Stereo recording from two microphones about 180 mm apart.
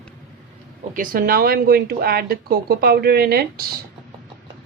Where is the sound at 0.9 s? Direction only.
50° right (ahead or behind).